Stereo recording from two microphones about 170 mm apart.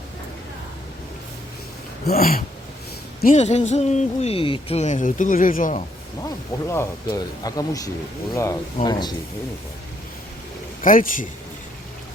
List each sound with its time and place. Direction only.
2.0 s a sound: 60° left (ahead or behind)
3.3 s speech: 40° left (ahead or behind)
6.2 s speech: 15° left (ahead or behind)
10.8 s speech: 55° left (ahead or behind)